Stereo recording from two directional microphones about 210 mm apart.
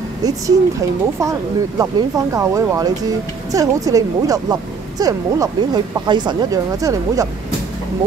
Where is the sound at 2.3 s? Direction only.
15° right (ahead or behind).